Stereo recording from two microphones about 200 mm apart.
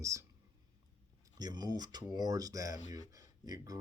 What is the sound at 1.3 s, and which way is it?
Speech, 20° right (ahead or behind).